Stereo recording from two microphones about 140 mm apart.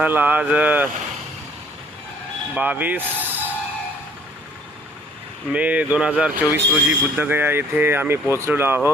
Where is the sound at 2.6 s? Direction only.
10° right (ahead or behind).